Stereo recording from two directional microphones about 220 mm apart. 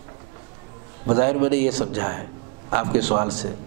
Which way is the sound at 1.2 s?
10° right (ahead or behind).